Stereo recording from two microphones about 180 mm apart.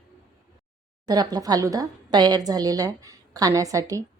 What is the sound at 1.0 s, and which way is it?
A woman's voice, 20° right (ahead or behind).